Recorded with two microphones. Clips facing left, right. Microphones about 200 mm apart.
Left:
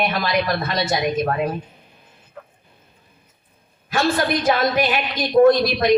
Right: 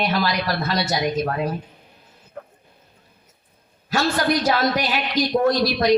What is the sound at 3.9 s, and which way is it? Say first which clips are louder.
A man's voice: left 1 dB; 55° left (ahead or behind).